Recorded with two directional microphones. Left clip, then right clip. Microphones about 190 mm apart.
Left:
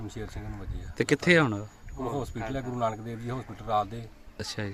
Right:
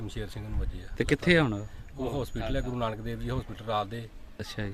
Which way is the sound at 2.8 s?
30° right (ahead or behind).